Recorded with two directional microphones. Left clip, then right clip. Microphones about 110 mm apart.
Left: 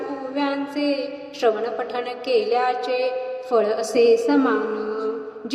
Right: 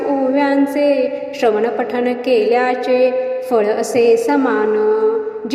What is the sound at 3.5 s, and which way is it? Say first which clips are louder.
A woman's voice: right 4 dB; 30° right (ahead or behind).